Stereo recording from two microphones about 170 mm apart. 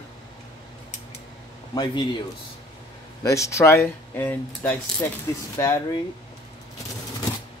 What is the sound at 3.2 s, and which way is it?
Speech, 20° left (ahead or behind).